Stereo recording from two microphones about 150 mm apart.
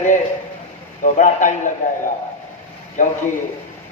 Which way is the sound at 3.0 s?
55° left (ahead or behind).